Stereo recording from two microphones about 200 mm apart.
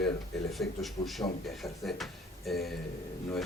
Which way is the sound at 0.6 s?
Centre (ahead or behind).